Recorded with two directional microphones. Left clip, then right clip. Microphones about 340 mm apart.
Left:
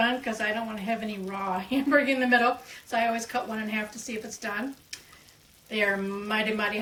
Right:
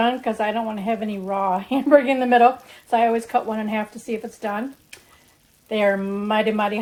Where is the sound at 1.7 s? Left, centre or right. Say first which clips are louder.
Right 7 dB; centre.